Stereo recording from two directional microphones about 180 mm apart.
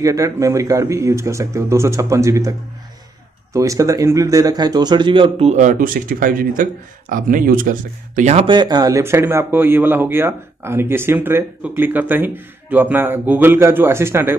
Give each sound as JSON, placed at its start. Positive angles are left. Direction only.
{"t": 0.0, "sound": "speech", "side_deg": -20}
{"t": 3.5, "sound": "a man's voice", "side_deg": -15}
{"t": 8.2, "sound": "speech", "side_deg": -35}